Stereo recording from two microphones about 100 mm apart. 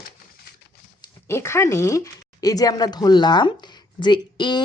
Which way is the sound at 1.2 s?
25° left (ahead or behind).